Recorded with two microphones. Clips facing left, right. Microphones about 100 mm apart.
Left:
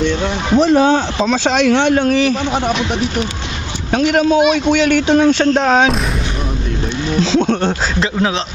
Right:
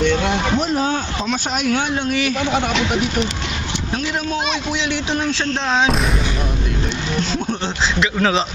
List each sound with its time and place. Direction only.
0.6 s speech: 90° left
2.0 s a man's voice: 40° left (ahead or behind)
3.9 s a man's voice: 85° left; by 5.9 s 50° left (ahead or behind)
7.3 s speech: 90° left